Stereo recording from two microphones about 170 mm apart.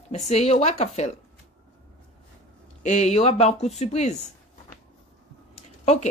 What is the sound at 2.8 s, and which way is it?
Speech, 45° left (ahead or behind).